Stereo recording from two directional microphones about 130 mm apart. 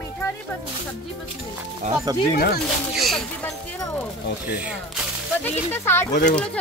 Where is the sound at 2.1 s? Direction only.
30° right (ahead or behind).